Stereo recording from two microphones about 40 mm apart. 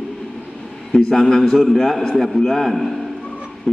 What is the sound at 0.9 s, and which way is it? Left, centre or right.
A man's voice, centre.